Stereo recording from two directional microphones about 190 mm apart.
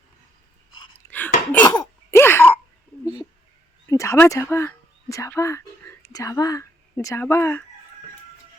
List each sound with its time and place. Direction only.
0.9 s a sound: 10° left (ahead or behind)
1.7 s throat clearing: 10° left (ahead or behind)
3.8 s speech: 15° left (ahead or behind)